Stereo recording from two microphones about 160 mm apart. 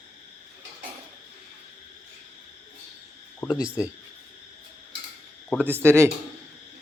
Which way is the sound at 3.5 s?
5° right (ahead or behind).